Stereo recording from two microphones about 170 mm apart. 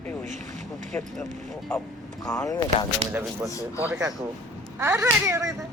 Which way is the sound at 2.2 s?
20° left (ahead or behind).